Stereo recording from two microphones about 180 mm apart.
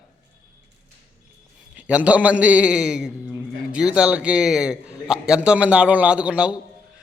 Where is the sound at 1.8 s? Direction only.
5° right (ahead or behind).